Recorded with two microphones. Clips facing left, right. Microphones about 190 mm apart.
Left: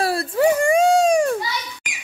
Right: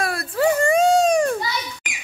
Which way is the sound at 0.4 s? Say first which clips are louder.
Left 1 dB; 15° left (ahead or behind).